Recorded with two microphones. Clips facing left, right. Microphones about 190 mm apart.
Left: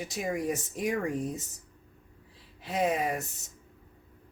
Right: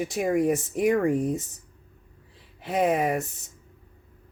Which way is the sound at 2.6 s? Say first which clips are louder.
Right 5 dB; 60° right (ahead or behind).